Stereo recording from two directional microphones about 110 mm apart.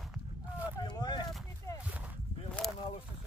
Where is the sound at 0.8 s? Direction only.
45° left (ahead or behind).